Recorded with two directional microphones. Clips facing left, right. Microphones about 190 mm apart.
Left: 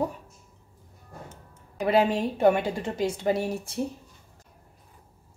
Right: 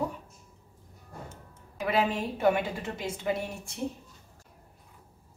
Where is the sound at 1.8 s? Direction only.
30° left (ahead or behind).